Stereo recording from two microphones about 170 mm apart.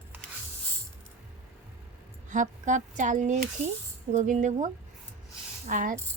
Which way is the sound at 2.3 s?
45° right (ahead or behind).